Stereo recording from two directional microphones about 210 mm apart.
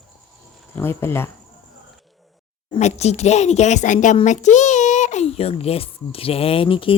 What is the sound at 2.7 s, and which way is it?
Speech, 30° left (ahead or behind).